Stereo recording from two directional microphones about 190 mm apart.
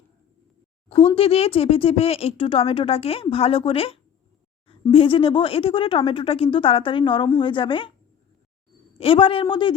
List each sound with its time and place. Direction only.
1.1 s speech: 30° left (ahead or behind)
9.0 s speech: 30° left (ahead or behind)